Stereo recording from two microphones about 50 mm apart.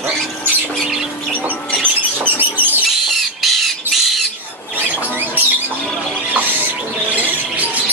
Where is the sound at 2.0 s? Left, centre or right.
Right.